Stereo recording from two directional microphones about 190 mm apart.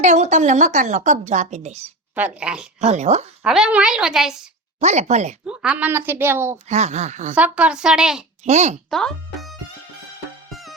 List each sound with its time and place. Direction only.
0.0 s a woman's voice: 40° right (ahead or behind)
2.1 s a woman's voice: 5° right (ahead or behind)
2.8 s a woman's voice: 35° right (ahead or behind)
3.4 s a woman's voice: 5° right (ahead or behind)
4.8 s a woman's voice: 35° right (ahead or behind)
5.5 s a woman's voice: 5° right (ahead or behind)
6.7 s a woman's voice: 35° right (ahead or behind)
7.3 s a woman's voice: 5° right (ahead or behind)
8.4 s a woman's voice: 35° right (ahead or behind)
8.9 s music: 5° left (ahead or behind)